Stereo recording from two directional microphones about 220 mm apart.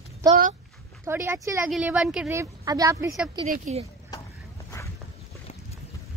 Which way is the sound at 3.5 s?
30° right (ahead or behind).